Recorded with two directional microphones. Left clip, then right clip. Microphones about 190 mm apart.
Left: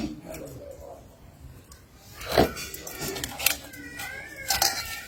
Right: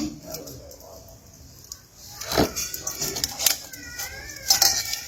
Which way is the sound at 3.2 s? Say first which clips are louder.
Right 2 dB; centre (ahead or behind).